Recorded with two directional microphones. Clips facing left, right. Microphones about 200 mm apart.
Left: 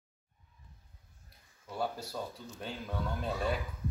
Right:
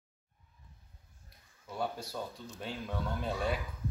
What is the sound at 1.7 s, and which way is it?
Speech, centre (ahead or behind).